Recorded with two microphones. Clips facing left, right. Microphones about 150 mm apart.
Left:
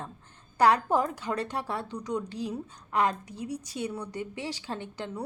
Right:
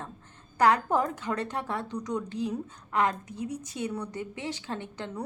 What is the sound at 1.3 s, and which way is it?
Speech, 15° left (ahead or behind).